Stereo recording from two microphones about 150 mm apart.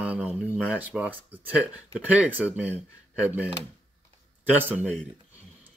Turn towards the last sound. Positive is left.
turn(degrees=-10)  # may be behind; listen again after turning